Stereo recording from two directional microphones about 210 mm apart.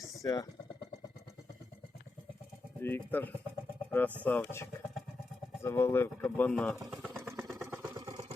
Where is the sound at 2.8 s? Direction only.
10° left (ahead or behind).